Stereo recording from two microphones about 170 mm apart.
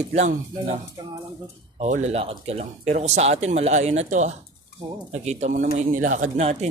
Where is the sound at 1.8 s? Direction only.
40° right (ahead or behind).